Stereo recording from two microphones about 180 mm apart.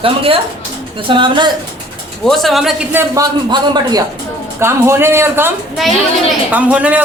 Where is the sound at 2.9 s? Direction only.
20° right (ahead or behind).